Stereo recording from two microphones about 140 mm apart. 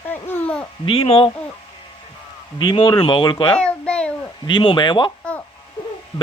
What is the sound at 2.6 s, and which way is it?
Speech, 35° left (ahead or behind).